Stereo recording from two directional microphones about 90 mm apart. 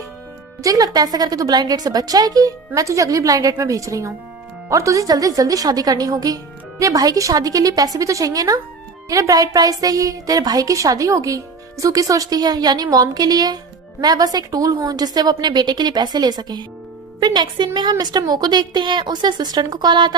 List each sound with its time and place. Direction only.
0.6 s a woman's voice: 40° right (ahead or behind)